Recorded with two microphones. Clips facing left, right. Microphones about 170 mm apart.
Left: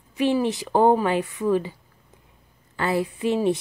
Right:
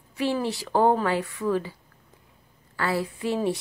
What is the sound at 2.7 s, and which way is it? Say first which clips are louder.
Speech: left 3 dB; 20° left (ahead or behind).